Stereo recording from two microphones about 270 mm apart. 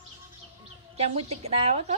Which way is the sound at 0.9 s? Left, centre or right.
Right.